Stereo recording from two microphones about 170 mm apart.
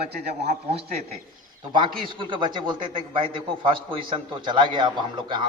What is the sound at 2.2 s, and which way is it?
A man's voice, 30° right (ahead or behind).